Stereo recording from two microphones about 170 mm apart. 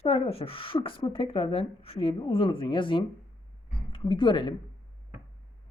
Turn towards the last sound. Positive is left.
turn(degrees=25)  # may be behind; listen again after turning